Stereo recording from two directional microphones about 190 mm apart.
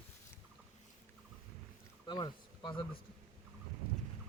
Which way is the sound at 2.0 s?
25° left (ahead or behind).